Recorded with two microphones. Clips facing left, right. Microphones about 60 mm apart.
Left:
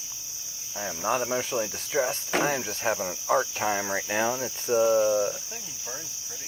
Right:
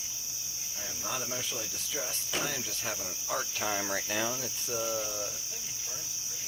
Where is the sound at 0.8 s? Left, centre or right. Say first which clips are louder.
Left 11 dB; left.